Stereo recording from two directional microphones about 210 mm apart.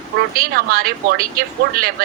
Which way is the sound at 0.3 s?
45° right (ahead or behind).